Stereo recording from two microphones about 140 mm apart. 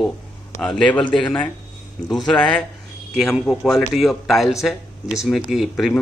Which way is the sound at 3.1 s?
Centre (ahead or behind).